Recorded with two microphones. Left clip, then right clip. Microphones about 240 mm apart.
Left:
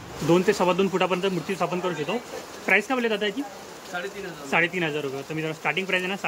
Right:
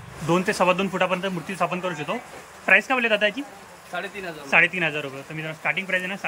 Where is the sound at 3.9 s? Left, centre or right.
Right.